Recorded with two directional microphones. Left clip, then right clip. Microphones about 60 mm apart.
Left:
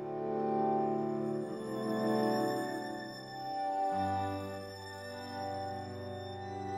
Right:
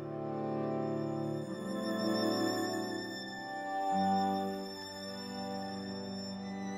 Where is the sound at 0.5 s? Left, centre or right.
Centre.